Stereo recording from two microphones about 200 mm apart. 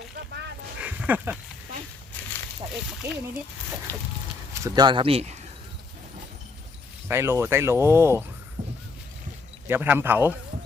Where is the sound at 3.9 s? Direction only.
10° left (ahead or behind).